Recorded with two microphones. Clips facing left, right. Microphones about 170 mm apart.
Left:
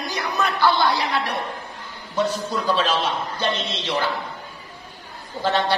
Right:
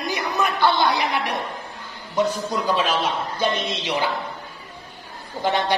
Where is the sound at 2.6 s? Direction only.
15° right (ahead or behind).